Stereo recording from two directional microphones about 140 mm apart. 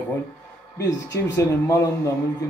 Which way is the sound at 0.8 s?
20° left (ahead or behind).